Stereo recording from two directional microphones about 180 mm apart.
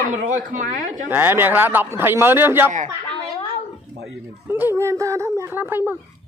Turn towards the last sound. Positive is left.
turn(degrees=-15)  # may be behind; listen again after turning